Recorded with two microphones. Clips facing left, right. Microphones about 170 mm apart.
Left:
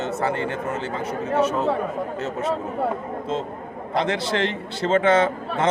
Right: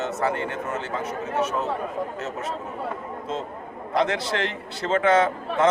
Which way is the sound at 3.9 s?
30° left (ahead or behind).